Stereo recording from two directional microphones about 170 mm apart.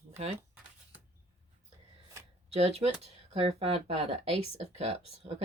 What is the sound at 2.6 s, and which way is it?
Speech, 40° right (ahead or behind).